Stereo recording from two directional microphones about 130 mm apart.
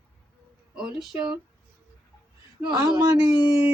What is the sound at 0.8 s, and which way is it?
Speech, 5° right (ahead or behind).